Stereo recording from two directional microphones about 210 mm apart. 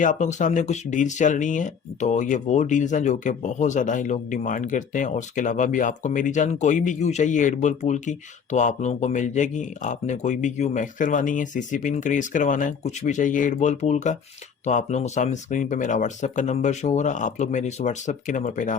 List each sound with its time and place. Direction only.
0.0 s speech: 35° left (ahead or behind)